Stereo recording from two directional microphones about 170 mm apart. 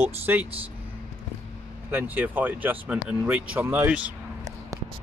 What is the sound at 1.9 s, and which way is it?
Speech, 10° right (ahead or behind).